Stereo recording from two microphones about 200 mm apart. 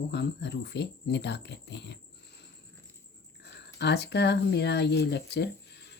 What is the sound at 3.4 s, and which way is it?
Speech, 55° left (ahead or behind).